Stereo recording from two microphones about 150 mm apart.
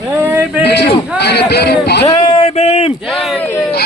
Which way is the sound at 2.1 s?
30° left (ahead or behind).